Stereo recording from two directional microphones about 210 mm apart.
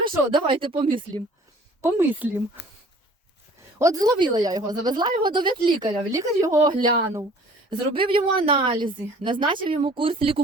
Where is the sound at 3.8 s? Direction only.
15° right (ahead or behind).